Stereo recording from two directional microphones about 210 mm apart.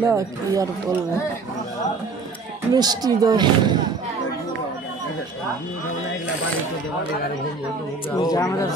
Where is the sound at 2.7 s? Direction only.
20° right (ahead or behind).